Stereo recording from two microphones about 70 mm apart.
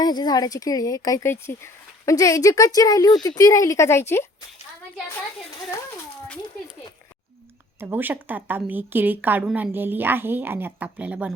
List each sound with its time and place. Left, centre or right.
0.0 s speech: left
1.2 s speech: left
2.1 s speech: left
7.8 s a woman's voice: right